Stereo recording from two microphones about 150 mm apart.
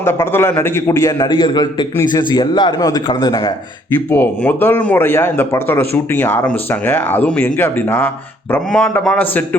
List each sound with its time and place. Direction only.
0.0 s a man's voice: 15° left (ahead or behind)
4.1 s speech: 10° left (ahead or behind)